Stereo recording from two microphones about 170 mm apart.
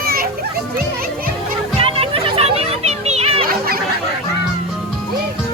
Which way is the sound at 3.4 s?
60° right (ahead or behind).